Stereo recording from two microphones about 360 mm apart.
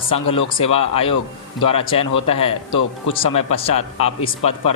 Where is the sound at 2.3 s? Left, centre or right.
Centre.